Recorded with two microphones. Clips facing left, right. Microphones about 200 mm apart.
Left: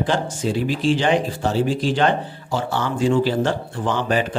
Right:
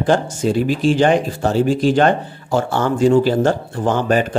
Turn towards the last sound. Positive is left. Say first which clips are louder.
# right 4 dB
turn(degrees=-45)  # may be behind; listen again after turning